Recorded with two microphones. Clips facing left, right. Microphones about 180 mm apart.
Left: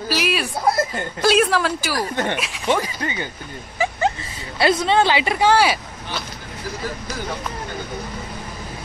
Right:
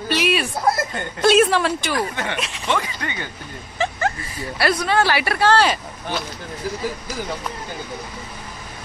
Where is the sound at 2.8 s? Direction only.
35° left (ahead or behind).